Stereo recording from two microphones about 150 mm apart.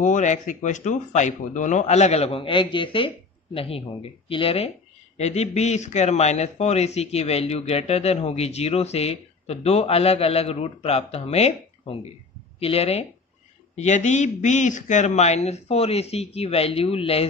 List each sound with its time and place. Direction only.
0.0 s a man's voice: 55° left (ahead or behind)